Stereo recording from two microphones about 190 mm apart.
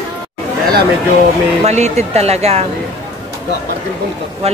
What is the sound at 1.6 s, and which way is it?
Speech, 35° right (ahead or behind).